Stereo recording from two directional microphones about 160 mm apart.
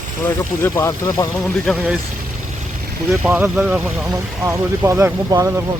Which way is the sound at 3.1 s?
10° right (ahead or behind).